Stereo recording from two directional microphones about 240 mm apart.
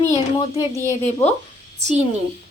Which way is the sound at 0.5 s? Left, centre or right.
Left.